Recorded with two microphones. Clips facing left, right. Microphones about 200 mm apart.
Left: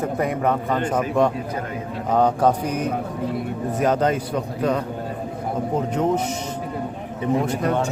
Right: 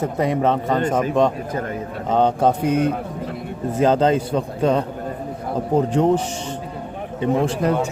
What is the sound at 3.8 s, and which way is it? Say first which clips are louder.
A man's voice: right 4 dB; 30° right (ahead or behind).